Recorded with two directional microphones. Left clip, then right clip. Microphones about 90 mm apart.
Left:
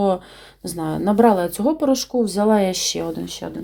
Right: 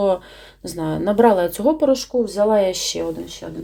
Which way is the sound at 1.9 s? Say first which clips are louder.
Right 1 dB; 40° left (ahead or behind).